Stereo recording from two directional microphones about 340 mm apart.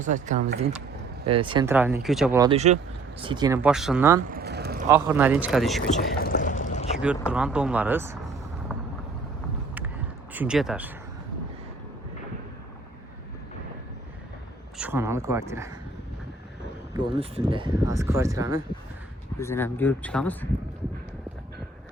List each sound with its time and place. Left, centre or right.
0.0 s speech: right; by 4.2 s centre
4.3 s vehicle: right
4.9 s speech: centre
5.8 s a sound: left
6.9 s speech: centre
10.3 s speech: centre
14.8 s speech: centre
16.9 s speech: centre
19.4 s speech: centre